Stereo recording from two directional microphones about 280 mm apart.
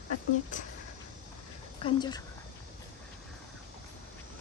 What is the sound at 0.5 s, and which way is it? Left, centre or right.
Speech, left.